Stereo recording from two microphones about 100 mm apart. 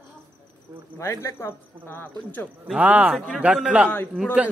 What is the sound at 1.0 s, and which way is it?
Speech, 30° left (ahead or behind).